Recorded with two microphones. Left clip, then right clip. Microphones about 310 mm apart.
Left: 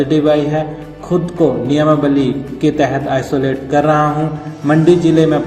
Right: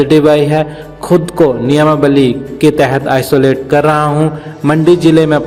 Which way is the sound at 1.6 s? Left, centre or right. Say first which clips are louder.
Right 4 dB; right.